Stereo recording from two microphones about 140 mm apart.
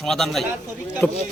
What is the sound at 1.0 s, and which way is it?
Speech, 15° left (ahead or behind).